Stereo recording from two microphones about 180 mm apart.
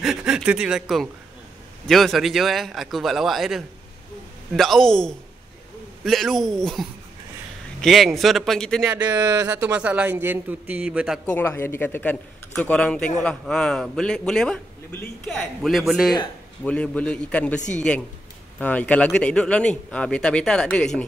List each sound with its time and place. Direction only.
0.0 s a sound: 5° right (ahead or behind)
1.9 s a man's voice: centre (ahead or behind)
9.0 s speech: 20° right (ahead or behind)
9.6 s a man's voice: 10° right (ahead or behind)
11.2 s a man's voice: 10° left (ahead or behind)
17.6 s speech: 40° left (ahead or behind)
18.6 s a man's voice: 10° left (ahead or behind)